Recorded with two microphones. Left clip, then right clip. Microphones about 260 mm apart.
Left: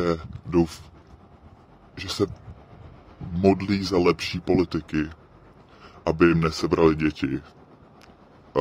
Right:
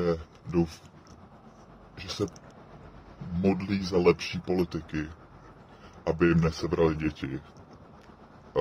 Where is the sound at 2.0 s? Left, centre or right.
Left.